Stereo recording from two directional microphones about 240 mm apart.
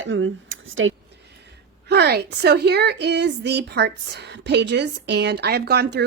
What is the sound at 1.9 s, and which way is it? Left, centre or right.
A woman's voice, right.